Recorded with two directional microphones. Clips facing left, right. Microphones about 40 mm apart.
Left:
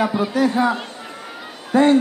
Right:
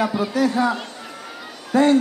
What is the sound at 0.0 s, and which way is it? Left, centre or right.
A man's voice, left.